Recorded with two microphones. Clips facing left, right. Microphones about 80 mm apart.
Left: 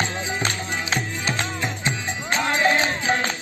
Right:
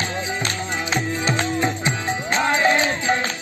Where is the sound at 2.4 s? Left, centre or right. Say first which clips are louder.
Right 2 dB; right.